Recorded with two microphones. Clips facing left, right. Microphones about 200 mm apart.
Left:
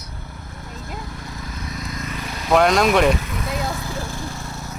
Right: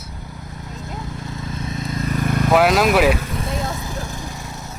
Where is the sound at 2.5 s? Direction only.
5° right (ahead or behind).